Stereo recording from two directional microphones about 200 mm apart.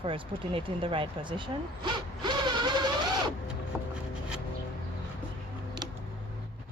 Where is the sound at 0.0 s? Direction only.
25° right (ahead or behind).